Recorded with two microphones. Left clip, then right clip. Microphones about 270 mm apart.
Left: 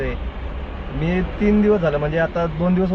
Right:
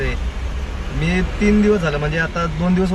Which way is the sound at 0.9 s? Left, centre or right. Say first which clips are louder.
Right 2 dB; centre.